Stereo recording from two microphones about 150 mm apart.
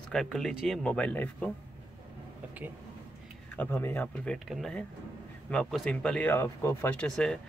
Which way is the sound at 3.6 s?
10° left (ahead or behind).